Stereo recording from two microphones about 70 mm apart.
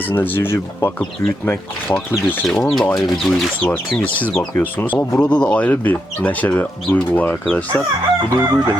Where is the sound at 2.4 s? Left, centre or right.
Centre.